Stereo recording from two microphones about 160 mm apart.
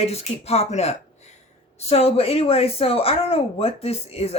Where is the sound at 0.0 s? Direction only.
40° left (ahead or behind).